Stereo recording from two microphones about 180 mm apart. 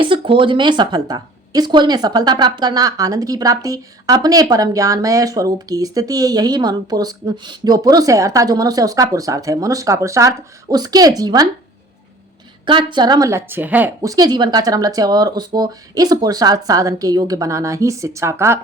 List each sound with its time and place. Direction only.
0.0 s a woman's voice: 30° right (ahead or behind)
12.6 s a woman's voice: 25° right (ahead or behind)